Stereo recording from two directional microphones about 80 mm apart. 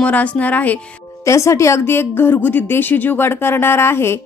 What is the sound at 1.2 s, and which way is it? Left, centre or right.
Speech, left.